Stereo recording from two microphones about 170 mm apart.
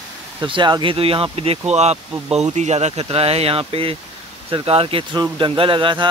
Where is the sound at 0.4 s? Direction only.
25° right (ahead or behind).